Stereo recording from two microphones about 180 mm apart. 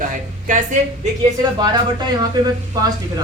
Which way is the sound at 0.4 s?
45° right (ahead or behind).